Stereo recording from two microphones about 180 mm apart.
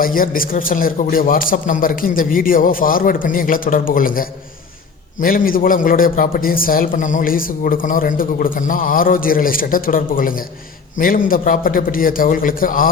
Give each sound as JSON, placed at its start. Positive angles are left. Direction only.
{"t": 0.0, "sound": "a man's voice", "side_deg": 50}